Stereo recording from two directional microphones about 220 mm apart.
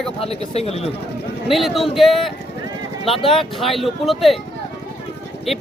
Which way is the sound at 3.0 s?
25° left (ahead or behind).